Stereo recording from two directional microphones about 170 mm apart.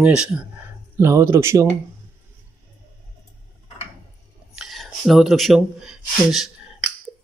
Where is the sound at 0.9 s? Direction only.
15° right (ahead or behind).